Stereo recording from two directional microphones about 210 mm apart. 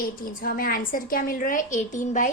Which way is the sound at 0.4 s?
45° left (ahead or behind).